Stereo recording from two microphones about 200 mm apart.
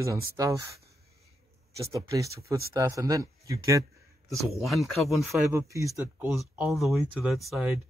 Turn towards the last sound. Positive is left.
turn(degrees=0)  # may be behind; listen again after turning